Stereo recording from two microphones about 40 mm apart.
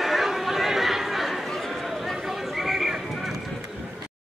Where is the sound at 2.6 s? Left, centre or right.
Centre.